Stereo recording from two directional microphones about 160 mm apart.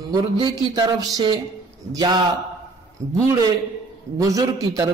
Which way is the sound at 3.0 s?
15° right (ahead or behind).